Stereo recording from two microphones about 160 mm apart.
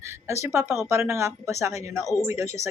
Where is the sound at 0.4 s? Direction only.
15° right (ahead or behind).